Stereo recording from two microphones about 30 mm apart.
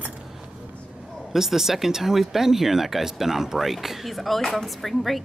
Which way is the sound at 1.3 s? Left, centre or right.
Centre.